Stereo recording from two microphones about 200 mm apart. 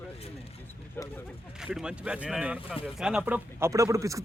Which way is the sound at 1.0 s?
10° left (ahead or behind).